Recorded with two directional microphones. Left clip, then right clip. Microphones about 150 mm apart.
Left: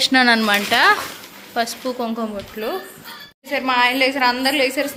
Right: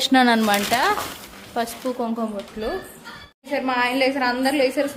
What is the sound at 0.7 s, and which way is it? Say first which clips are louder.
A woman's voice: left 5 dB; centre (ahead or behind).